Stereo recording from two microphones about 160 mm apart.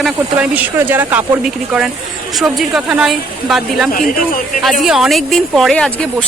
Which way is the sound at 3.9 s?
60° left (ahead or behind).